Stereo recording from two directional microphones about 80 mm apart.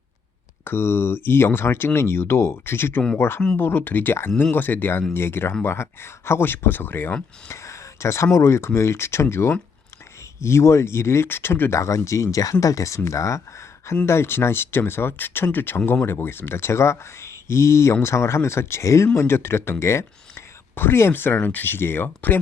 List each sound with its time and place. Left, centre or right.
0.6 s speech: left
7.4 s speech: left
11.8 s speech: left